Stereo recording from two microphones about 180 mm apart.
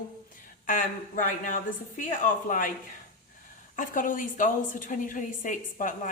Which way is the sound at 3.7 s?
50° left (ahead or behind).